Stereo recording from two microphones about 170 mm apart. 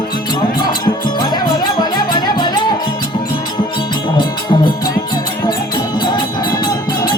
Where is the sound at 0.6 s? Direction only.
25° left (ahead or behind).